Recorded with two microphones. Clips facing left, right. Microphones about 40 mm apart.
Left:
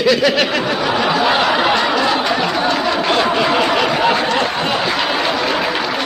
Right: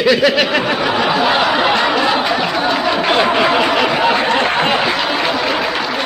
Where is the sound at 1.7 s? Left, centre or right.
Centre.